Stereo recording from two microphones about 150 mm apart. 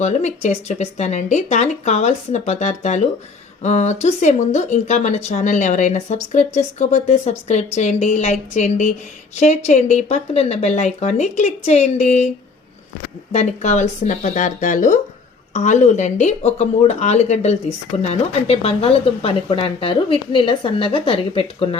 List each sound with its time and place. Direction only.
0.0 s speech: 50° left (ahead or behind)
13.3 s speech: 50° left (ahead or behind)